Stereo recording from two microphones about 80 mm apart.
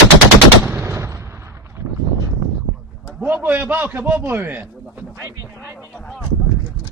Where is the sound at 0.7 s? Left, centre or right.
Right.